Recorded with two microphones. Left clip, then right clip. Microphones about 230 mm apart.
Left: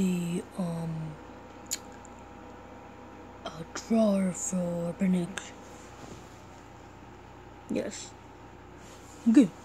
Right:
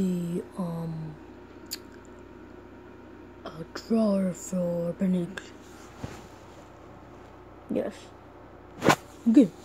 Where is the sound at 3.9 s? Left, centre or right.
Centre.